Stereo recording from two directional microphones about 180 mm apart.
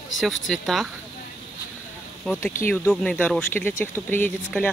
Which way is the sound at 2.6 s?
10° left (ahead or behind).